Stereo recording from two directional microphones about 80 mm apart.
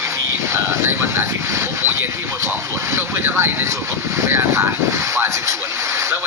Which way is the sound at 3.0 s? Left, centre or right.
Right.